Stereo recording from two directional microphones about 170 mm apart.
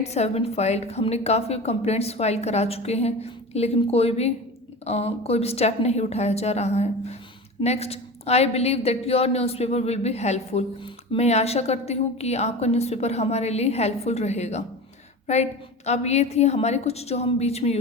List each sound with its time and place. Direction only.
0.0 s a woman's voice: 40° left (ahead or behind)